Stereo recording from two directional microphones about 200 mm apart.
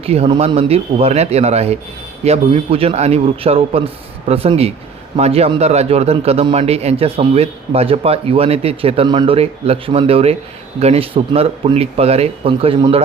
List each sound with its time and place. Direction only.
0.0 s a man's voice: 30° right (ahead or behind)